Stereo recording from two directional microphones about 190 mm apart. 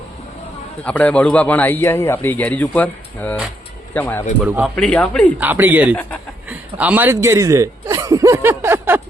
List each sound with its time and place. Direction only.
0.9 s a man's voice: 5° left (ahead or behind)
4.4 s speech: 10° right (ahead or behind)
4.7 s a man's voice: 5° left (ahead or behind)
5.4 s speech: 10° right (ahead or behind)